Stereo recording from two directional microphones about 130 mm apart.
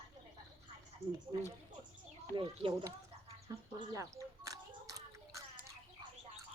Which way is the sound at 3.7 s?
25° right (ahead or behind).